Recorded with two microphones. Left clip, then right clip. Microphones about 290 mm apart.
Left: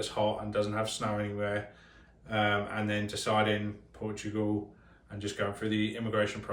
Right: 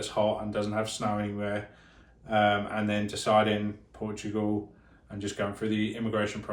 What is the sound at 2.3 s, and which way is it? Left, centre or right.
Speech, centre.